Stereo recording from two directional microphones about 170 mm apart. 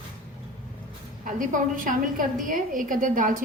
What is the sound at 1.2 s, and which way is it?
A woman's voice, 50° right (ahead or behind).